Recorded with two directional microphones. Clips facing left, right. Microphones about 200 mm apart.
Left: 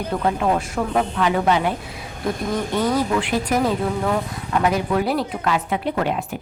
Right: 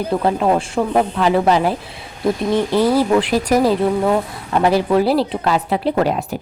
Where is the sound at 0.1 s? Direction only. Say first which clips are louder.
Right 4 dB; 30° right (ahead or behind).